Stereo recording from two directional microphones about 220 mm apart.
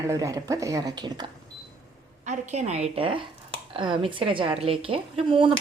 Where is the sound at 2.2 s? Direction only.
35° right (ahead or behind).